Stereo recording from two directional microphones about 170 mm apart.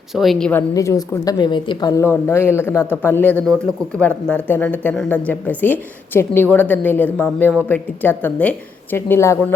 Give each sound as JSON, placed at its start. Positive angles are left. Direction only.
{"t": 0.1, "sound": "a woman's voice", "side_deg": 0}
{"t": 0.7, "sound": "speech", "side_deg": 20}